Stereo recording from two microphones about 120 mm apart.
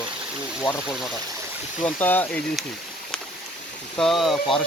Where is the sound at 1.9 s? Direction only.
15° left (ahead or behind).